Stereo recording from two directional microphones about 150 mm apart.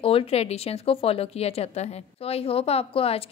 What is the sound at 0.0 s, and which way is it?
Speech, 40° left (ahead or behind).